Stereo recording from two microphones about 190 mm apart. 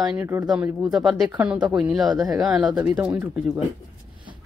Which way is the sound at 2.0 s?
20° right (ahead or behind).